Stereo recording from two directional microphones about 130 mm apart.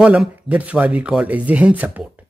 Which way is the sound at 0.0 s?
10° right (ahead or behind).